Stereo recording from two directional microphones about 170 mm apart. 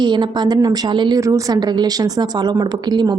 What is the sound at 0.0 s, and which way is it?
A woman's voice, 25° right (ahead or behind).